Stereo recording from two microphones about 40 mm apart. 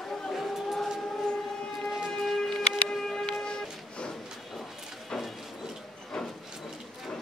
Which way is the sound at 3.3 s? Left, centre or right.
Left.